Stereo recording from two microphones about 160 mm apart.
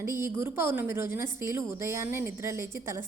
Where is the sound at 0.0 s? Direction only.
15° right (ahead or behind).